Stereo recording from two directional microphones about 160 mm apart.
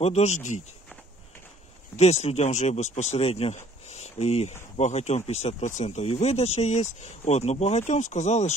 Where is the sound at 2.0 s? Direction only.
45° left (ahead or behind).